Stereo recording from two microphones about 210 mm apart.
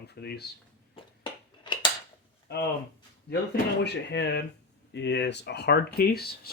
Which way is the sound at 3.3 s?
55° left (ahead or behind).